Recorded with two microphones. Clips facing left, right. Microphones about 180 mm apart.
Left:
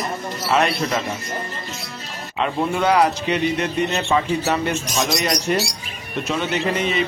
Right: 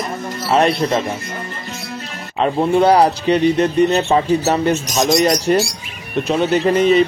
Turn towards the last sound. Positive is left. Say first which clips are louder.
# right 9 dB
turn(degrees=-40)  # may be behind; listen again after turning